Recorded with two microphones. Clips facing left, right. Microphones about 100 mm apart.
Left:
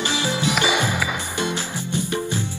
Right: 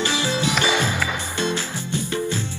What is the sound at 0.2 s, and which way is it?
Music, 15° left (ahead or behind).